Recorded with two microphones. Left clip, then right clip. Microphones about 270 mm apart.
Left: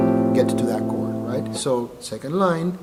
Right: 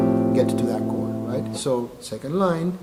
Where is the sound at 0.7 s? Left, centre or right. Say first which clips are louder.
Left 1 dB; left.